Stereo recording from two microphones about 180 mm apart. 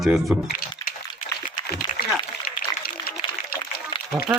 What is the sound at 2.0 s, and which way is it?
Applause, 55° left (ahead or behind).